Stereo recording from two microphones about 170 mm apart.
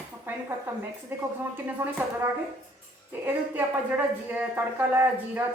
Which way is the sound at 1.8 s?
15° right (ahead or behind).